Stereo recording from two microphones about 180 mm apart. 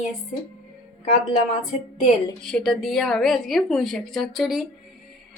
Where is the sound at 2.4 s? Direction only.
5° left (ahead or behind).